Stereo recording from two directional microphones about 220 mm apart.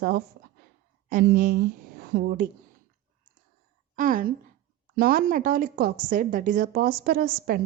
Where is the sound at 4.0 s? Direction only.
40° right (ahead or behind).